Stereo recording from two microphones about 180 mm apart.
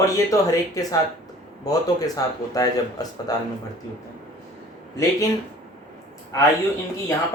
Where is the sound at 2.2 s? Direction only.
20° left (ahead or behind).